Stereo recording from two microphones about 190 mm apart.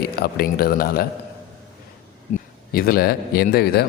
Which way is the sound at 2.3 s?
50° left (ahead or behind).